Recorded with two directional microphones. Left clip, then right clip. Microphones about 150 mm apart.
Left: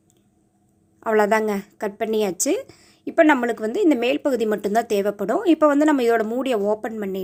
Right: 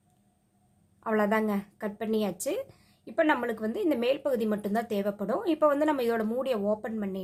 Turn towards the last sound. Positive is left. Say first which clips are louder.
# left 8 dB
turn(degrees=35)  # may be behind; listen again after turning